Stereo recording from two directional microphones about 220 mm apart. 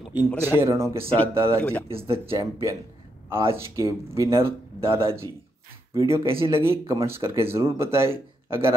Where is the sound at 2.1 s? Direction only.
25° right (ahead or behind).